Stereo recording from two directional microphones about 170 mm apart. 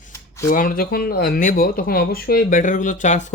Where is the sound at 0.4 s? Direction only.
55° left (ahead or behind).